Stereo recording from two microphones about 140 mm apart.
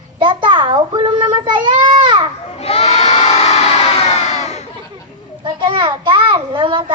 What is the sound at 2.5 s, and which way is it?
Crowd, 45° left (ahead or behind).